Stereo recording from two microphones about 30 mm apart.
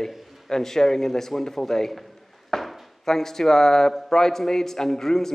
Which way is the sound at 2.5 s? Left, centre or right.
Centre.